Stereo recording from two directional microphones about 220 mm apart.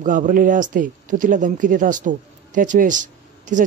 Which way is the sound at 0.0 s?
35° right (ahead or behind).